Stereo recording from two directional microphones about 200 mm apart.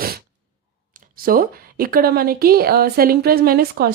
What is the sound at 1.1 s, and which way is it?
Speech, 45° right (ahead or behind).